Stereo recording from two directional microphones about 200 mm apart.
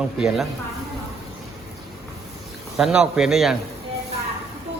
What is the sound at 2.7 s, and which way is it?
Speech, 5° right (ahead or behind).